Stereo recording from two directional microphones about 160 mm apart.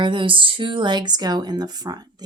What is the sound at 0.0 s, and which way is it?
Speech, 30° right (ahead or behind).